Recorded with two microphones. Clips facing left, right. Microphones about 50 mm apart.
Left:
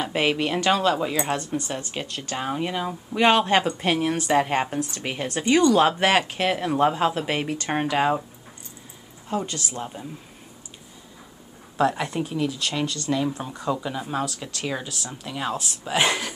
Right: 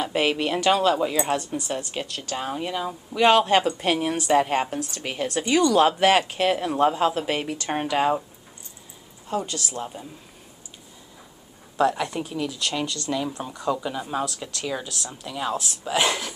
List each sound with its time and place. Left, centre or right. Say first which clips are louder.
0.0 s speech: even; centre
2.1 s speech: left 3 dB; centre
3.8 s speech: left 1 dB; centre
5.4 s speech: left 1 dB; left
6.3 s speech: right 1 dB; centre
7.4 s speech: left 1 dB; left
7.7 s speech: even; centre
9.3 s speech: even; centre
11.7 s speech: even; centre
16.0 s speech: left 1 dB; centre